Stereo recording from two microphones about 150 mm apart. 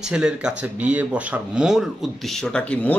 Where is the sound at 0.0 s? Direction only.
5° right (ahead or behind).